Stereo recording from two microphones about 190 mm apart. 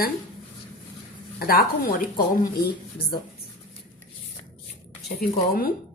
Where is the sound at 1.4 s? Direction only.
50° left (ahead or behind).